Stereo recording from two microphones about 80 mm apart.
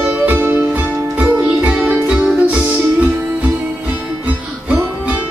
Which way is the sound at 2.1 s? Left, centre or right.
Centre.